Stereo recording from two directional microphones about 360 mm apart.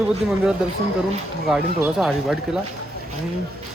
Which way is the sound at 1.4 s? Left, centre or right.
Centre.